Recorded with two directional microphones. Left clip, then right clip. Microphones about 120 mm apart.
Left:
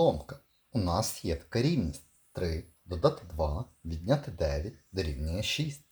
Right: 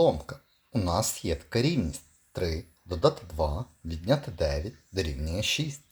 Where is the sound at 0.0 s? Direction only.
20° right (ahead or behind).